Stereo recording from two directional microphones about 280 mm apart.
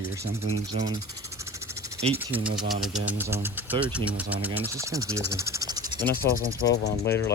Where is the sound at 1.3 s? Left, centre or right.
Centre.